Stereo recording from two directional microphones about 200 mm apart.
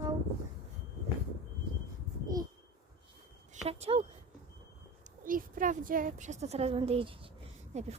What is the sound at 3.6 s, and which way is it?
Speech, 30° right (ahead or behind).